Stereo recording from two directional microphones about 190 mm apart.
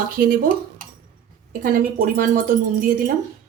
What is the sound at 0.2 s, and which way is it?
Speech, 50° right (ahead or behind).